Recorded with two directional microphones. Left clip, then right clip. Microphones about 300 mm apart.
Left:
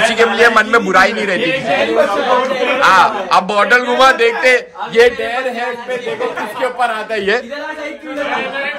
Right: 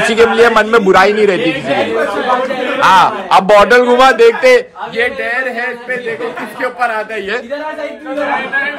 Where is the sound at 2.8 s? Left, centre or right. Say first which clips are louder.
Right 2 dB; centre.